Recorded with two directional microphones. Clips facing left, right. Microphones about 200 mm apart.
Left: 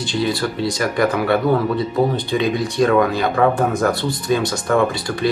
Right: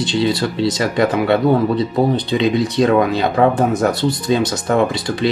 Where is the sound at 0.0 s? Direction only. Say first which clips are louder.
Right 3 dB; 20° right (ahead or behind).